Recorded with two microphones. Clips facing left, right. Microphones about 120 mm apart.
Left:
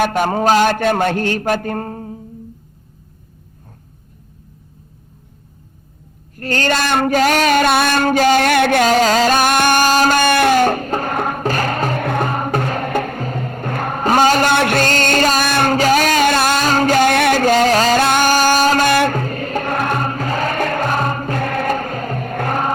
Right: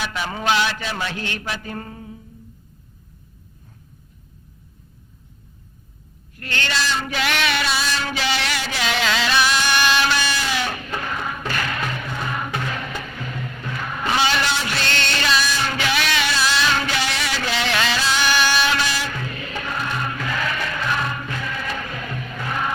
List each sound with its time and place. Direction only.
0.0 s a man's voice: 50° left (ahead or behind)
6.3 s a sound: 40° left (ahead or behind)
12.0 s music: 55° left (ahead or behind)